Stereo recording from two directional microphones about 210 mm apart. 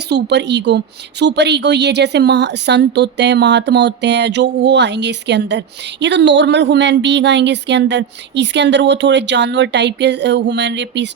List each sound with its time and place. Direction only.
0.1 s a woman's voice: 55° right (ahead or behind)